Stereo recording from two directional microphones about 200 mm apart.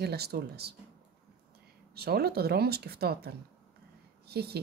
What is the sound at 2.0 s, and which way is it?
Speech, 50° right (ahead or behind).